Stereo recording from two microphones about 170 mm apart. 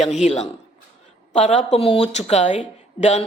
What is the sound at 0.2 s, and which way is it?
A man's voice, 40° left (ahead or behind).